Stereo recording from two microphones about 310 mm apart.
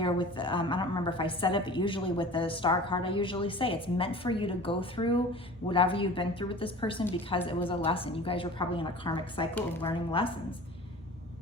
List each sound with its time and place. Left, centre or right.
0.0 s a woman's voice: centre
7.6 s a woman's voice: centre
7.9 s a woman's voice: centre